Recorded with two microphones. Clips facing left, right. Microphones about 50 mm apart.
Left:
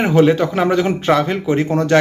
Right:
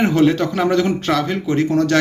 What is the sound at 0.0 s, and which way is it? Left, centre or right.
Speech, centre.